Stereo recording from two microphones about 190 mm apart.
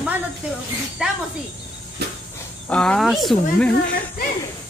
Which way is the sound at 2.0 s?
60° right (ahead or behind).